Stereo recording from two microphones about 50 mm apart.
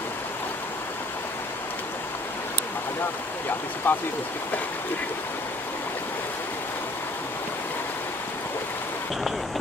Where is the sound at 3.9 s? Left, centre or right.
Left.